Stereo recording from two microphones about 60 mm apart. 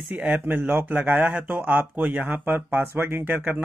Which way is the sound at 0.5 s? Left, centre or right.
Right.